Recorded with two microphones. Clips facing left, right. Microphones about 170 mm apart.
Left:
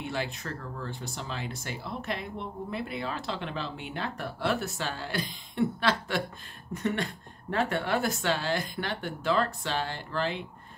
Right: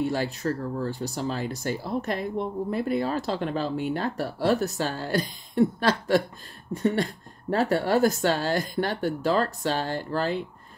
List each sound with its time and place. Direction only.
0.0 s speech: 40° right (ahead or behind)